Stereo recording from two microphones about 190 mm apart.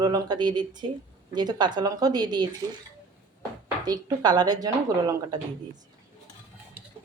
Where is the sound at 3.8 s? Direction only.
20° right (ahead or behind).